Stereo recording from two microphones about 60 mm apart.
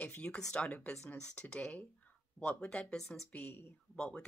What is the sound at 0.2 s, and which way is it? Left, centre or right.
Speech, centre.